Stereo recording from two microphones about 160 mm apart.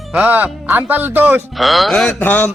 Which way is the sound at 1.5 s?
Centre (ahead or behind).